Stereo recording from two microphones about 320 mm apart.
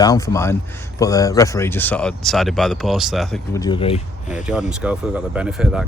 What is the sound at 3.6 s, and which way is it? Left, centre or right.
Speech, centre.